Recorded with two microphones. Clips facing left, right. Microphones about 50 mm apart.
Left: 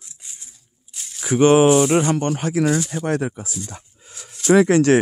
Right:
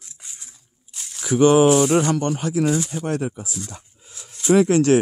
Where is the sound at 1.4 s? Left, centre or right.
Left.